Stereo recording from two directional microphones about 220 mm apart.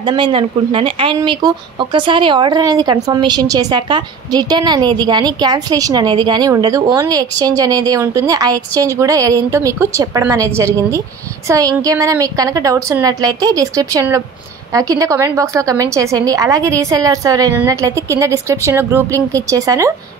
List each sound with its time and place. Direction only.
0.0 s speech: 20° right (ahead or behind)